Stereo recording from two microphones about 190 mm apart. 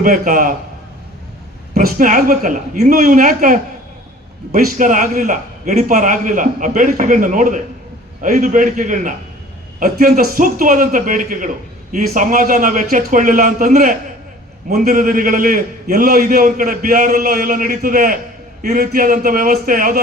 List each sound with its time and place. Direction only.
0.0 s a man's voice: 45° right (ahead or behind)
1.8 s a man's voice: 45° right (ahead or behind)